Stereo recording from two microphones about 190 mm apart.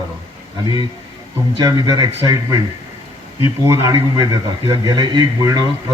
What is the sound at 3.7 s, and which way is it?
A man's voice, 15° right (ahead or behind).